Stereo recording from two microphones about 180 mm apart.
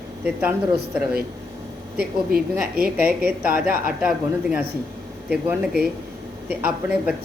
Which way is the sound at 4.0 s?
5° right (ahead or behind).